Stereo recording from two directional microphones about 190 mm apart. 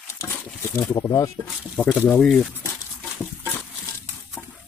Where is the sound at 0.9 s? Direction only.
15° left (ahead or behind).